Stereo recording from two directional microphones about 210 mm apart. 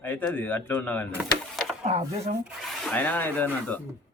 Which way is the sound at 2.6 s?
Centre (ahead or behind).